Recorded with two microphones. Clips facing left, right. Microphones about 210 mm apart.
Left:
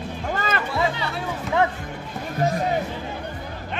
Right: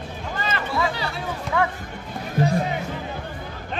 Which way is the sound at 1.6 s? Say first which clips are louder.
Left 2 dB; 20° left (ahead or behind).